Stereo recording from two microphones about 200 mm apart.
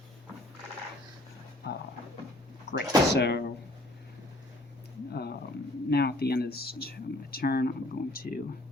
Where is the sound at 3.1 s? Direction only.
55° left (ahead or behind).